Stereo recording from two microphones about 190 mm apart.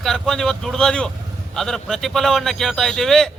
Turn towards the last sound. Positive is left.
turn(degrees=0)  # may be behind; listen again after turning